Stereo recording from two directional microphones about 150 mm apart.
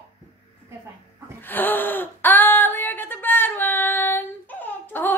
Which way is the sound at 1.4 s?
15° left (ahead or behind).